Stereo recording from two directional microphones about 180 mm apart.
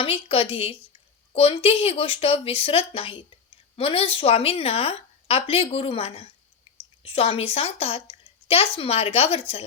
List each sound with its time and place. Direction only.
0.0 s a woman's voice: 30° left (ahead or behind)